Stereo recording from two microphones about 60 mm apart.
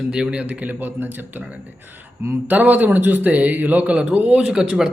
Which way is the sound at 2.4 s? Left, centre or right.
Right.